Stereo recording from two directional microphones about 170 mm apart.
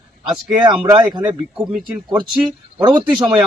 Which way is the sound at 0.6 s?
25° right (ahead or behind).